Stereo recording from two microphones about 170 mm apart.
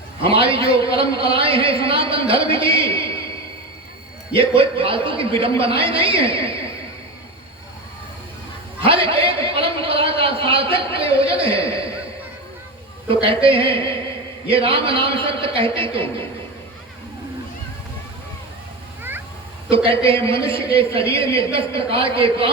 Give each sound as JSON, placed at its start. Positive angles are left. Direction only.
{"t": 0.3, "sound": "a man's voice", "side_deg": -35}
{"t": 4.4, "sound": "a man's voice", "side_deg": -30}
{"t": 8.8, "sound": "a sound", "side_deg": -30}
{"t": 13.2, "sound": "a man's voice", "side_deg": -30}
{"t": 19.7, "sound": "a man's voice", "side_deg": -35}